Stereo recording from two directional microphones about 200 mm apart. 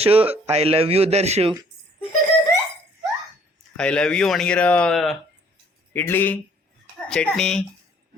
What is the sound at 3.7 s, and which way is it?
Speech, 5° left (ahead or behind).